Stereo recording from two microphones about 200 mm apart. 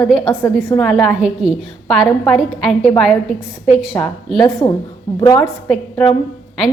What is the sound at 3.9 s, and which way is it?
Speech, 15° left (ahead or behind).